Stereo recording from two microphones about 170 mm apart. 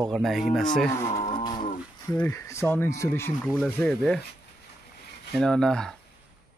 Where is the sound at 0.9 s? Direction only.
15° left (ahead or behind).